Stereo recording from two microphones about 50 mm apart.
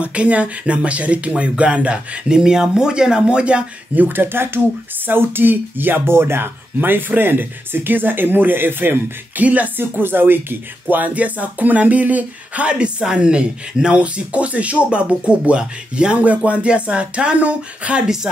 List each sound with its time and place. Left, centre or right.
0.0 s speech: right
3.9 s speech: right
9.4 s speech: right